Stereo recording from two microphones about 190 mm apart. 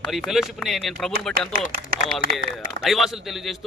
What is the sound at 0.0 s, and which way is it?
A man's voice, centre (ahead or behind).